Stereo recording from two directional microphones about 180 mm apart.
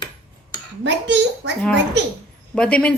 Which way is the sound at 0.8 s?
75° right (ahead or behind).